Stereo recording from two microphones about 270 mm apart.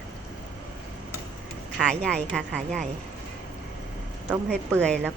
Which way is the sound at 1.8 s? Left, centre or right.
Centre.